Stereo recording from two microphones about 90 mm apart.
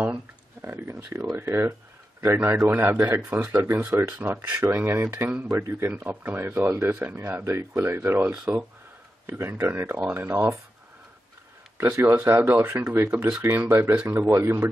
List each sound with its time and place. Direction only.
0.6 s a sound: 25° right (ahead or behind)
1.3 s a man's voice: 25° right (ahead or behind)
11.8 s speech: 20° right (ahead or behind)
14.0 s a man's voice: 35° right (ahead or behind)